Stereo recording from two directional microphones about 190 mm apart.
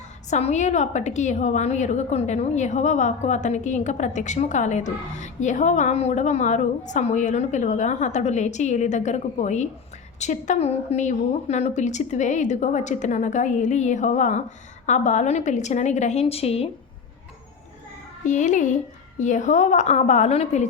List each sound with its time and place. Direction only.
0.3 s a woman's voice: 35° left (ahead or behind)
18.3 s a woman's voice: 40° left (ahead or behind)